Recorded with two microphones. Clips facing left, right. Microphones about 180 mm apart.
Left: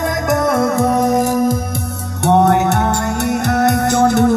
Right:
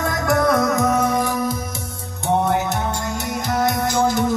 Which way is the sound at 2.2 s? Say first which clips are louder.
Left 7 dB; 70° left (ahead or behind).